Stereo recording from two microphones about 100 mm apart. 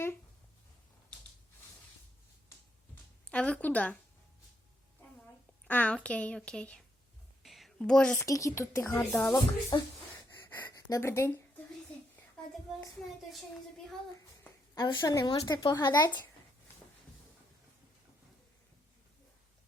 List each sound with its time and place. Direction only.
2.9 s a sound: 15° left (ahead or behind)
5.6 s a woman's voice: 15° left (ahead or behind)
7.4 s a sound: centre (ahead or behind)
8.1 s speech: 30° left (ahead or behind)
9.3 s a woman's voice: 35° left (ahead or behind)
14.8 s speech: 40° left (ahead or behind)